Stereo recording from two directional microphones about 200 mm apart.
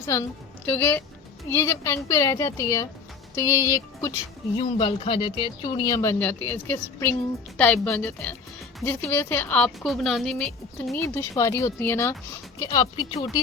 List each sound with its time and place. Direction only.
0.1 s a woman's voice: 15° left (ahead or behind)
4.5 s a woman's voice: 25° left (ahead or behind)
12.5 s speech: 20° left (ahead or behind)